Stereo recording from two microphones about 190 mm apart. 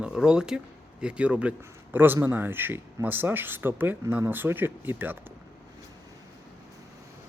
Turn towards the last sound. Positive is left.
turn(degrees=-10)  # may be behind; listen again after turning